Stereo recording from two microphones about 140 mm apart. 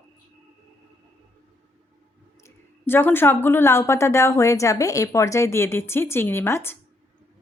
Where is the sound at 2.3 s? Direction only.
20° left (ahead or behind).